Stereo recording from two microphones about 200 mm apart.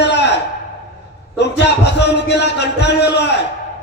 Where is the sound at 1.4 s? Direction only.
55° left (ahead or behind).